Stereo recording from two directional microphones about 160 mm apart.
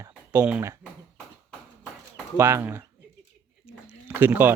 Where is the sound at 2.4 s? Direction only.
15° right (ahead or behind).